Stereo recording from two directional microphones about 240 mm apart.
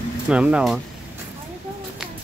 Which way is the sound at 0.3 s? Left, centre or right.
Centre.